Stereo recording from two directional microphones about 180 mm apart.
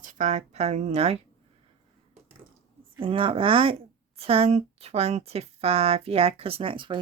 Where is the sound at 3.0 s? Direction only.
30° right (ahead or behind).